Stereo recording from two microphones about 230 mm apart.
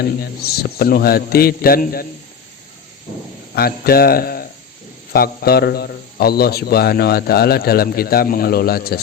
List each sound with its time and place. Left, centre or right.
0.0 s a man's voice: left
3.5 s a man's voice: left